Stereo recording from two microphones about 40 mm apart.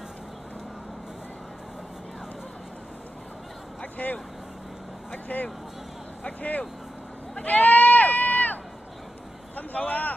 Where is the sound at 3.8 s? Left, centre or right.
Left.